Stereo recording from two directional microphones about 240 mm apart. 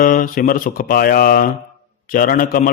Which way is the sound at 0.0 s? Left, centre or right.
Left.